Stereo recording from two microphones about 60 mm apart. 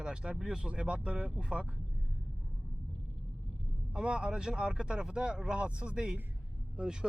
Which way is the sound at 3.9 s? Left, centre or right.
Centre.